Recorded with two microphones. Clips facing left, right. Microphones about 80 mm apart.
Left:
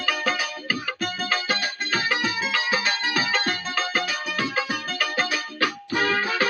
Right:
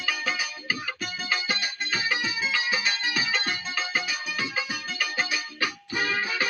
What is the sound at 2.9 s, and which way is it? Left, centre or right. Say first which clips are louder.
Music: left 4 dB; left.